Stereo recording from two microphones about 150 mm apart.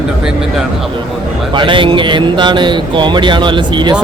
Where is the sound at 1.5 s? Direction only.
35° right (ahead or behind).